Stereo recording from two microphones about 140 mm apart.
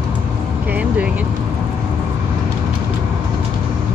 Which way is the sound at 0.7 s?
10° right (ahead or behind).